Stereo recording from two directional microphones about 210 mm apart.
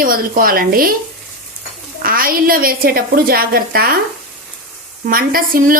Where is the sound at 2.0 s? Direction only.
45° right (ahead or behind).